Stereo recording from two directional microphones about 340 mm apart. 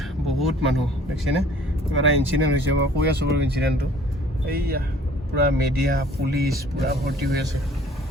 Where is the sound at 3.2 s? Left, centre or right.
Right.